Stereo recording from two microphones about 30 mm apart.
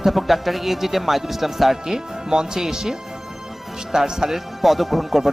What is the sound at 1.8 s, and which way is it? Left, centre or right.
Speech, right.